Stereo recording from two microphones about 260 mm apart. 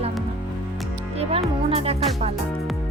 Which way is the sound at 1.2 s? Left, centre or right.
Right.